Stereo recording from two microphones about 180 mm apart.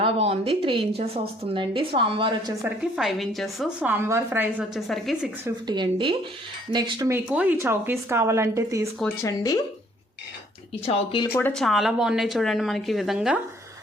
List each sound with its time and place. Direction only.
0.0 s a woman's voice: 30° right (ahead or behind)
2.9 s a woman's voice: centre (ahead or behind)
5.6 s a woman's voice: 25° right (ahead or behind)
7.1 s a woman's voice: 5° right (ahead or behind)
9.2 s speech: 20° left (ahead or behind)
10.8 s speech: 30° left (ahead or behind)
11.3 s a woman's voice: 10° left (ahead or behind)